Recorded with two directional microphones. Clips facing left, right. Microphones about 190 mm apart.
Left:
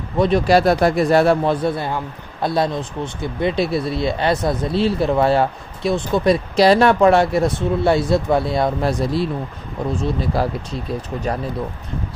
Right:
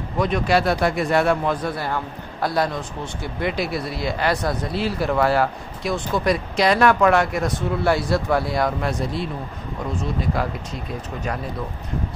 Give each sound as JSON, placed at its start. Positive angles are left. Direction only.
{"t": 0.2, "sound": "speech", "side_deg": 35}
{"t": 9.0, "sound": "speech", "side_deg": 35}